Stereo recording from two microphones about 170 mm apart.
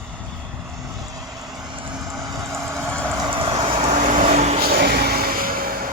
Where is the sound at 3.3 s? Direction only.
30° right (ahead or behind).